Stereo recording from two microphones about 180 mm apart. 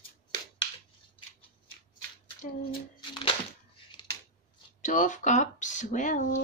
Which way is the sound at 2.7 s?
30° left (ahead or behind).